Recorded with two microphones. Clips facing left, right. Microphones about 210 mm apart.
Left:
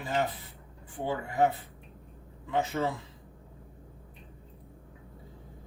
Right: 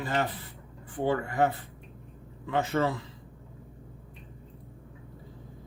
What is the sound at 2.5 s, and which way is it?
Speech, 85° right.